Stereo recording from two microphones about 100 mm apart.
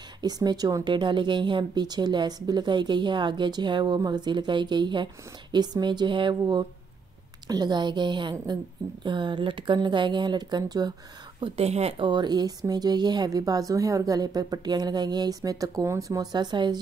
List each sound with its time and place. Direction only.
0.2 s speech: 40° right (ahead or behind)
11.4 s speech: 90° right
12.0 s speech: 50° right (ahead or behind)